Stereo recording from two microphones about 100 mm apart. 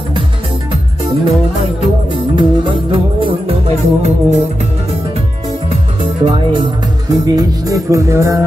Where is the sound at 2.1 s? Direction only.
55° right (ahead or behind); by 4.1 s 80° right.